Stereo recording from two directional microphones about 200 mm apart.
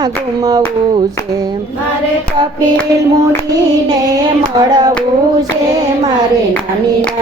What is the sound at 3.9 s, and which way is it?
Clapping, 20° right (ahead or behind).